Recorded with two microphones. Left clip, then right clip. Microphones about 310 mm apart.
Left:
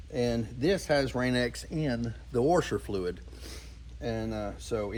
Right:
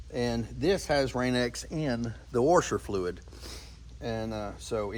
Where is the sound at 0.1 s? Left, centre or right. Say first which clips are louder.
Left 1 dB; centre.